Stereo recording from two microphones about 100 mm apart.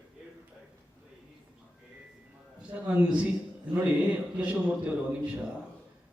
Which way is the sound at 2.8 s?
10° right (ahead or behind).